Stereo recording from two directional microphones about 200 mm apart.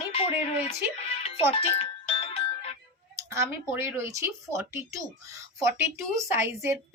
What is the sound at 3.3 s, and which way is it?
Speech, 15° right (ahead or behind).